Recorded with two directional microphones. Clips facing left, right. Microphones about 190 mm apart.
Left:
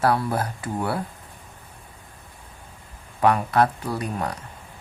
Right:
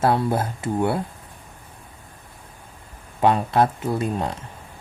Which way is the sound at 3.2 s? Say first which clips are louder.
Right 1 dB; 25° right (ahead or behind).